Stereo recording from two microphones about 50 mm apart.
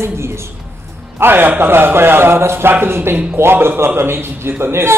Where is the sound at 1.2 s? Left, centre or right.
Right.